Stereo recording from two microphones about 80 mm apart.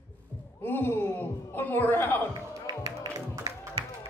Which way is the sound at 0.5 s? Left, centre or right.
Left.